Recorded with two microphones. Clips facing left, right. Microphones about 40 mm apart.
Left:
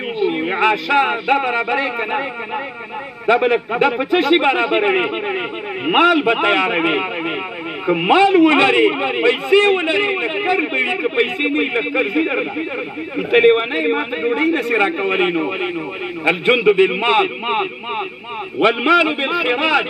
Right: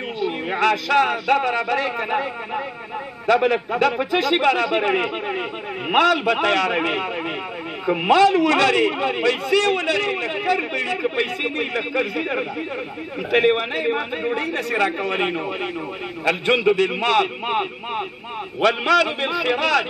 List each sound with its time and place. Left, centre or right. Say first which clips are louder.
0.2 s a man's voice: left 4 dB; left